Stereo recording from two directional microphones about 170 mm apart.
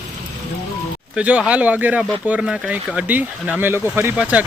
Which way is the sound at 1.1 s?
5° right (ahead or behind).